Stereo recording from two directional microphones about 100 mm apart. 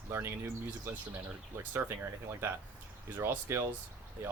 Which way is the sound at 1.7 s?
20° right (ahead or behind).